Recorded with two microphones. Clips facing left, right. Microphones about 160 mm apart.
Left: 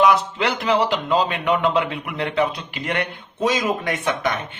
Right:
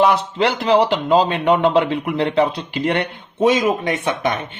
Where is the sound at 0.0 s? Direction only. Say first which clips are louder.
Right 2 dB; 35° right (ahead or behind).